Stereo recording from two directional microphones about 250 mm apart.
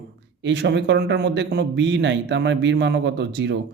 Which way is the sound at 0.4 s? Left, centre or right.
Right.